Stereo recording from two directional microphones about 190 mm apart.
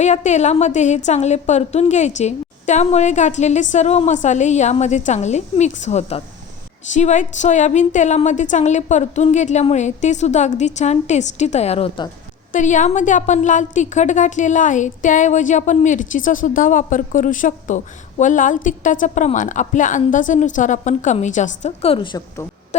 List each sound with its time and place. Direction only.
0.0 s a woman's voice: 40° left (ahead or behind)
12.5 s a woman's voice: 40° left (ahead or behind); by 22.4 s 25° left (ahead or behind)
22.7 s a sound: 35° left (ahead or behind)